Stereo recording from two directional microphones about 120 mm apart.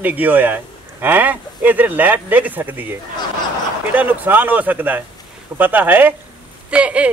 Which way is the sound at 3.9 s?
15° right (ahead or behind).